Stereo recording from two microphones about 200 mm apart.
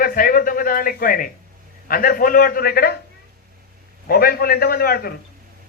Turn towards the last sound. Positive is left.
turn(degrees=50)  # may be behind; listen again after turning